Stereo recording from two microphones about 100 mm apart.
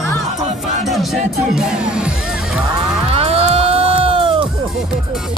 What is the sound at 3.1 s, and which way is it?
Music, 80° right.